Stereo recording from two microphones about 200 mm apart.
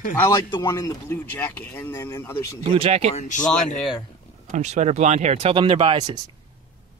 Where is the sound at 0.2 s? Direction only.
20° left (ahead or behind).